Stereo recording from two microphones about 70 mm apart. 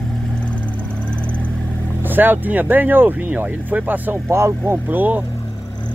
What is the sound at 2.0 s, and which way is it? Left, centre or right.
Speech, right.